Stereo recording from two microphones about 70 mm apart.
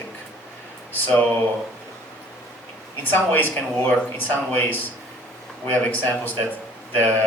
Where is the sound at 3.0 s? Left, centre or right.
Left.